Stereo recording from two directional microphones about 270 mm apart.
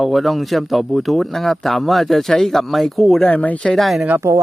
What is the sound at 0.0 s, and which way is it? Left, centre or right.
Speech, centre.